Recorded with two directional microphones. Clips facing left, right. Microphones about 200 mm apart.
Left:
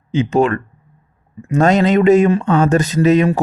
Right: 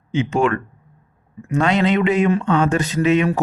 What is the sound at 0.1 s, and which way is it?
Speech, 35° left (ahead or behind).